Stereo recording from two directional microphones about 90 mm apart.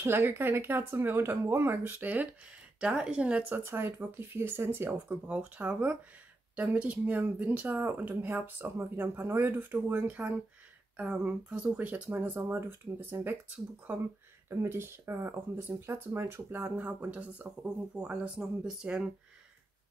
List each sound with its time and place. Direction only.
0.0 s speech: 25° right (ahead or behind)
14.5 s speech: 30° right (ahead or behind); by 19.0 s 5° right (ahead or behind)